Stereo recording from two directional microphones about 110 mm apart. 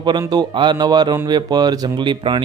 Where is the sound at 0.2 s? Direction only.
40° right (ahead or behind).